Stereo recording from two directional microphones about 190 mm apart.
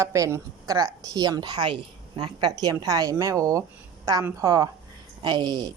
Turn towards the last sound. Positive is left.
turn(degrees=-20)  # may be behind; listen again after turning